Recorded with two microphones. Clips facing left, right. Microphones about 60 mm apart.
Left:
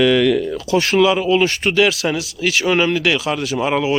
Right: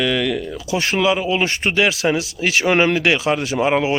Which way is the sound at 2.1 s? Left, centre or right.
Right.